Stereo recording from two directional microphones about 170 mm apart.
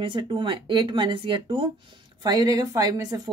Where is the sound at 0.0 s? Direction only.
30° right (ahead or behind).